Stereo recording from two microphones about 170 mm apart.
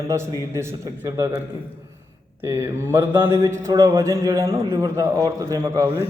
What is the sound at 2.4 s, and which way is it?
A man's voice, 15° right (ahead or behind).